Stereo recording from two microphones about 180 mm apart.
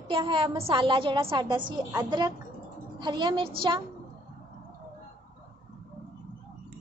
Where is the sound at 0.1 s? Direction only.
25° right (ahead or behind).